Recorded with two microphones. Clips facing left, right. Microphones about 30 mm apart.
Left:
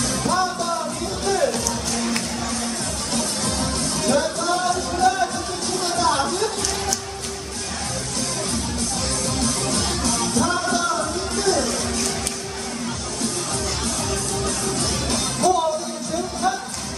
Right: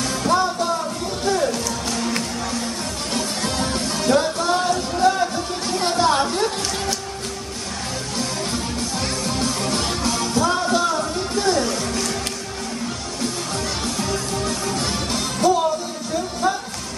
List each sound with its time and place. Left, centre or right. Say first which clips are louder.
0.0 s music: right 2 dB; centre
3.2 s music: right 1 dB; centre
9.4 s music: right 1 dB; centre
14.1 s music: right 1 dB; centre